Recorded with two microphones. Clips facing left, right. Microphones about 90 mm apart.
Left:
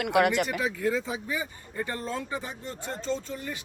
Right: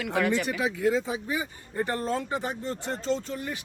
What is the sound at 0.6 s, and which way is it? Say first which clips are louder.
Speech: right 2 dB; 20° right (ahead or behind).